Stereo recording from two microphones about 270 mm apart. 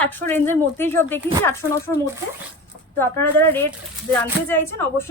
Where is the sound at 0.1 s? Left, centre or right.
Centre.